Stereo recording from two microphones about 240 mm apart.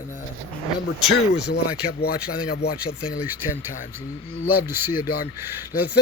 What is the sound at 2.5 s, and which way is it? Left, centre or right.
Speech, left.